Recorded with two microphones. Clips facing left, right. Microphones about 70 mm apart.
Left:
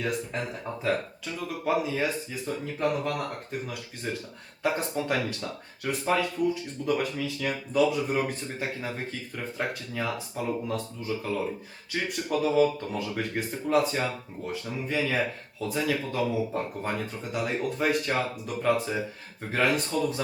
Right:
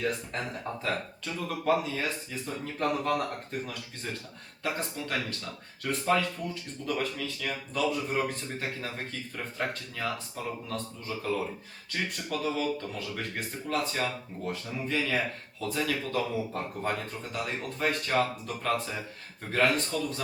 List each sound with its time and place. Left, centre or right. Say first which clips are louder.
0.0 s speech: left 1 dB; centre
4.6 s speech: left 6 dB; centre
12.3 s speech: left 8 dB; centre